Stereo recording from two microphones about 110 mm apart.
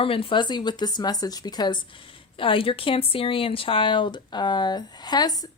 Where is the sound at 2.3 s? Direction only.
55° left (ahead or behind).